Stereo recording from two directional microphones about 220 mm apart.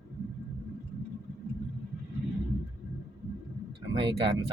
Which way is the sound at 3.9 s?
20° right (ahead or behind).